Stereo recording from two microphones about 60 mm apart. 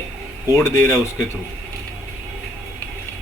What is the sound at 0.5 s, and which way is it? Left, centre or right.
Speech, left.